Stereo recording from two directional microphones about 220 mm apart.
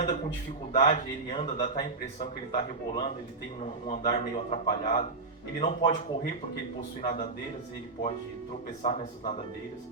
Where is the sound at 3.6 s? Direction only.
25° left (ahead or behind).